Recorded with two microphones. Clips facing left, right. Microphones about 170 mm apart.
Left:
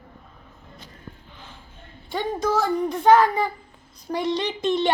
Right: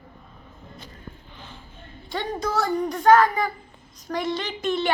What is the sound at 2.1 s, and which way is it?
A woman's voice, 10° left (ahead or behind).